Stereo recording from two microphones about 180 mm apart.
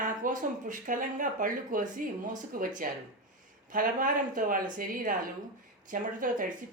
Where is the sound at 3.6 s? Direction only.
50° right (ahead or behind).